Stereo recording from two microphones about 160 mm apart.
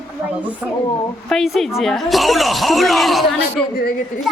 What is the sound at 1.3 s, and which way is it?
A woman's voice, centre (ahead or behind).